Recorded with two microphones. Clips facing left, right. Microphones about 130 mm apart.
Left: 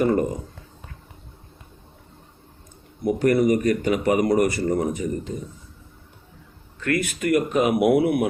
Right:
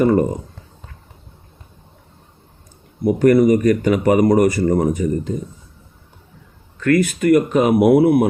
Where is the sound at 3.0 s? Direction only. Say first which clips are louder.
Right 6 dB; 45° right (ahead or behind).